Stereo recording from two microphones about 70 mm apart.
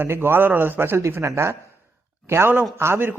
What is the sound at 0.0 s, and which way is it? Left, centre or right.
A man's voice, right.